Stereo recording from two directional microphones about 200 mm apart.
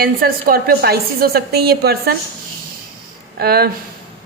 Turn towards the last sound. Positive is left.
turn(degrees=-50)  # may be behind; listen again after turning